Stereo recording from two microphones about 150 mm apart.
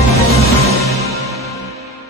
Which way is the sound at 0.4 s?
20° left (ahead or behind).